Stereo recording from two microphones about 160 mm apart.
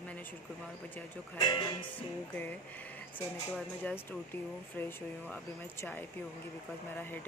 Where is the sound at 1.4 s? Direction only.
25° left (ahead or behind).